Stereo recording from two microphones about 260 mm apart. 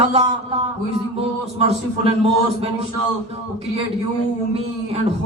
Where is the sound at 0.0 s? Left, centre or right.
Right.